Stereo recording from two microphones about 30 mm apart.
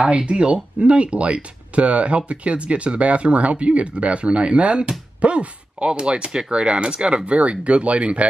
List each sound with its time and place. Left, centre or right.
0.3 s speech: right
7.2 s speech: right